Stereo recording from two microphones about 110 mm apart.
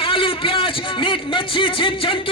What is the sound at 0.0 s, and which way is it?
A man's voice, 50° left (ahead or behind).